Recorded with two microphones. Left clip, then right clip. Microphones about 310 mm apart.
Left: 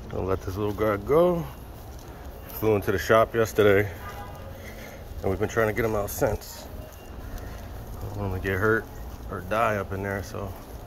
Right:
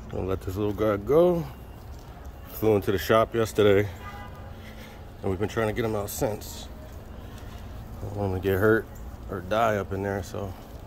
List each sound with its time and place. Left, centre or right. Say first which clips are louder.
0.1 s speech: left 2 dB; centre
2.6 s speech: right 1 dB; centre
5.2 s speech: left 3 dB; centre
8.2 s speech: right 2 dB; centre